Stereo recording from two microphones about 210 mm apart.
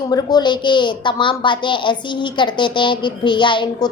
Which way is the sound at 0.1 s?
20° left (ahead or behind).